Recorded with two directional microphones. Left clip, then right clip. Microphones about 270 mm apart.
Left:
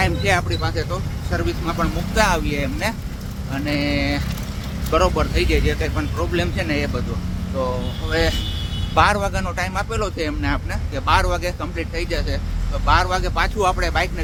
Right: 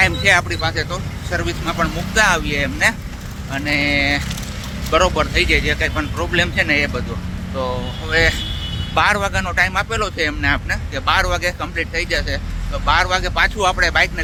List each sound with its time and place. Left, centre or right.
0.0 s speech: centre
8.1 s speech: centre